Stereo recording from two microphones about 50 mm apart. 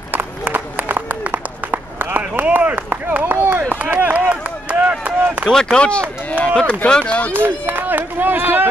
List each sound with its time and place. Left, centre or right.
0.1 s a sound: right
3.8 s chop: right
5.5 s speech: centre
7.3 s speech: right